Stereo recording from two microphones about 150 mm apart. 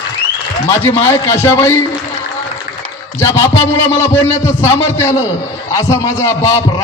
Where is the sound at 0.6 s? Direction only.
15° left (ahead or behind).